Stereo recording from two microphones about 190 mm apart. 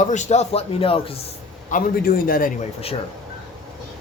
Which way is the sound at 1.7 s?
50° left (ahead or behind).